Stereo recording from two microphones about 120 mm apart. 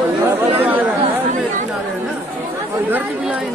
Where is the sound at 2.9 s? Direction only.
15° right (ahead or behind).